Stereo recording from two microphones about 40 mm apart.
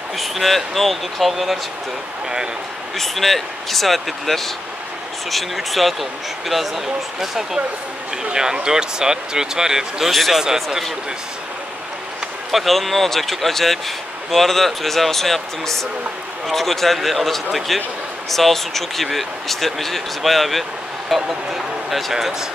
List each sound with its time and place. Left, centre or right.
0.2 s speech: centre
2.2 s speech: centre
3.0 s speech: centre
8.2 s speech: centre
12.4 s speech: centre